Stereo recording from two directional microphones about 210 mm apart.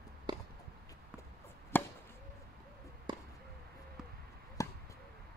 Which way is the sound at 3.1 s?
20° right (ahead or behind).